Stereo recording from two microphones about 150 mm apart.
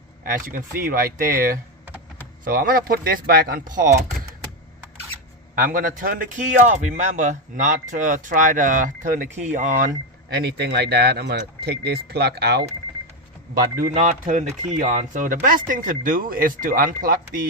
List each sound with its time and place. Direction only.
0.3 s speech: 65° right (ahead or behind)
5.5 s a man's voice: 70° right (ahead or behind); by 12.6 s 90° right
13.5 s speech: 70° right (ahead or behind)
13.9 s a man's voice: 55° right (ahead or behind); by 17.2 s 75° right (ahead or behind)